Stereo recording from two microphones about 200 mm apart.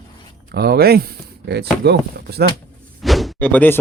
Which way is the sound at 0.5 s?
50° right (ahead or behind).